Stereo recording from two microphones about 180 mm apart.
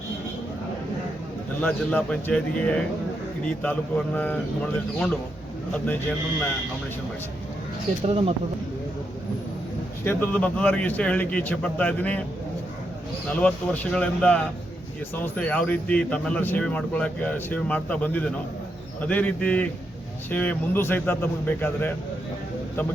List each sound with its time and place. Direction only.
1.6 s speech: 5° left (ahead or behind)
8.0 s speech: 30° right (ahead or behind)
10.0 s speech: 10° left (ahead or behind)
13.4 s speech: 5° left (ahead or behind)